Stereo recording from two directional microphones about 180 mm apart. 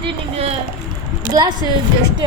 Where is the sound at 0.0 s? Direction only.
35° right (ahead or behind).